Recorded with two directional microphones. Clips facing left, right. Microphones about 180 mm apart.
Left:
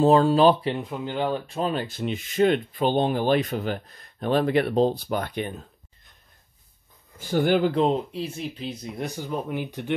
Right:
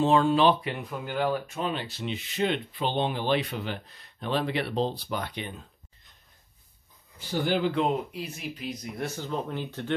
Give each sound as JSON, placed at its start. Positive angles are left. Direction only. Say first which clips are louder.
{"t": 0.0, "sound": "speech", "louder": "left 4 dB", "side_deg": 35}
{"t": 7.2, "sound": "speech", "louder": "left 6 dB", "side_deg": 50}
{"t": 7.7, "sound": "speech", "louder": "left 4 dB", "side_deg": 30}